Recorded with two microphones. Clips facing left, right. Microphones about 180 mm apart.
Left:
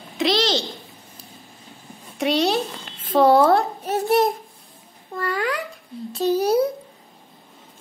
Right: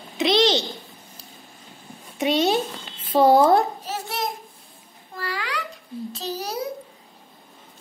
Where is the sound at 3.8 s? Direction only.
60° left (ahead or behind).